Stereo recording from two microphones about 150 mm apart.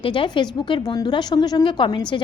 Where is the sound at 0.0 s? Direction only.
35° left (ahead or behind).